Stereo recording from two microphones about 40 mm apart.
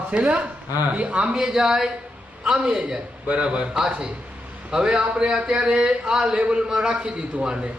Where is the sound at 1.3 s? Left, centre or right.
Centre.